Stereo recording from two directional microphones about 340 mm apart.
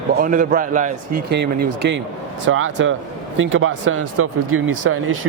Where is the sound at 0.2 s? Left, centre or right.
Right.